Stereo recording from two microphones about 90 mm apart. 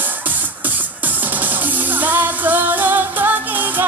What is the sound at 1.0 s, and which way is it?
Music, 20° right (ahead or behind).